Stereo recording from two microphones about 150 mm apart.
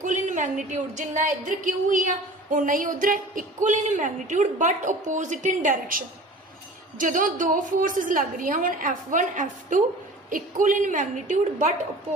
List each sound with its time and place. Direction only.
0.0 s a woman's voice: 55° right (ahead or behind)
7.0 s a woman's voice: 60° right (ahead or behind)